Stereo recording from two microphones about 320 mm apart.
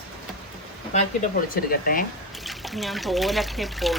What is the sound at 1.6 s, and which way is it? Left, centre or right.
Speech, left.